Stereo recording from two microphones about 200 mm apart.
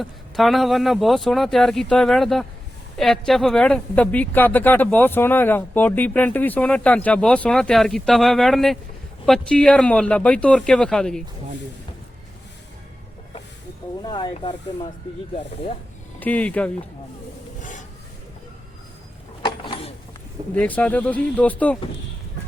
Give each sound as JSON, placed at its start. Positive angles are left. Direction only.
{"t": 0.0, "sound": "speech", "side_deg": 0}
{"t": 14.0, "sound": "speech", "side_deg": 20}
{"t": 16.2, "sound": "speech", "side_deg": 5}
{"t": 17.6, "sound": "a sound", "side_deg": 40}
{"t": 19.5, "sound": "a sound", "side_deg": 25}
{"t": 20.6, "sound": "speech", "side_deg": 5}